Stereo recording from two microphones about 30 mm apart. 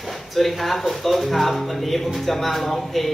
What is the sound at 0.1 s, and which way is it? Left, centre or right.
Speech, centre.